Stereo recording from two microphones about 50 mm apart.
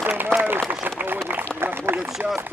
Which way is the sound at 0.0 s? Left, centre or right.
Right.